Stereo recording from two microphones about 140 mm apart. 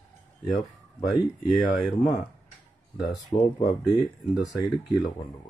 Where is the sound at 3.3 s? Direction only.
30° left (ahead or behind).